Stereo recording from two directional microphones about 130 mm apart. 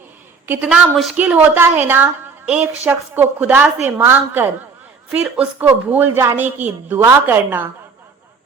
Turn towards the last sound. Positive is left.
turn(degrees=-15)  # may be behind; listen again after turning